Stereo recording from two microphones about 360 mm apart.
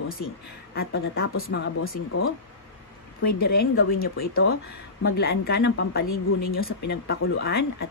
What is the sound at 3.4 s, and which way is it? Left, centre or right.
A woman's voice, left.